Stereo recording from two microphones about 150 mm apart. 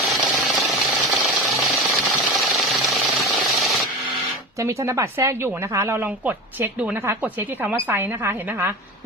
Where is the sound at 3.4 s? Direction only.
Centre (ahead or behind).